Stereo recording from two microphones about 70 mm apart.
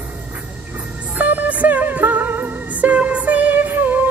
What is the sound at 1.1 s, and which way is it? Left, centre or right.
Music, right.